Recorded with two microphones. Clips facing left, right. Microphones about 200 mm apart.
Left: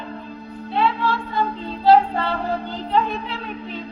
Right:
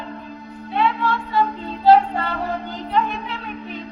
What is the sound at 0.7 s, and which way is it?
Music, 30° left (ahead or behind).